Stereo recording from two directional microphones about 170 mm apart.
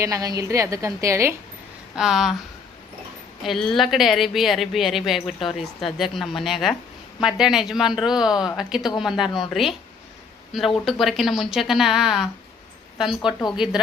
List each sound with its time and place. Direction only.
0.0 s a woman's voice: 20° right (ahead or behind)
2.0 s speech: 5° right (ahead or behind)
3.4 s speech: centre (ahead or behind)